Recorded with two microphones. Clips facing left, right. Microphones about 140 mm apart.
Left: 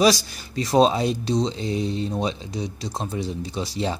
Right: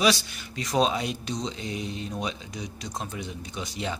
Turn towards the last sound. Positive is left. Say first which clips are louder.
# left 6 dB
turn(degrees=30)  # may be behind; listen again after turning